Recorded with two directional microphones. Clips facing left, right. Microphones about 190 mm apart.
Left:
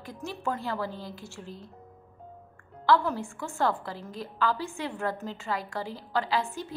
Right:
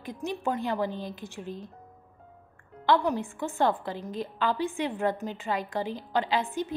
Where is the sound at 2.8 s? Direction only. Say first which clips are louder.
Even; 20° right (ahead or behind).